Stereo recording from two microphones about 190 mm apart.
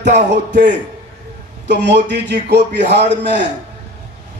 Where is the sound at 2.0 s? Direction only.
65° right (ahead or behind).